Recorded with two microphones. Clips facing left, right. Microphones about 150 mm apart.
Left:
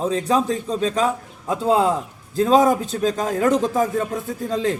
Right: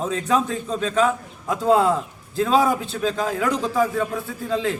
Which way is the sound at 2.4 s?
40° left (ahead or behind).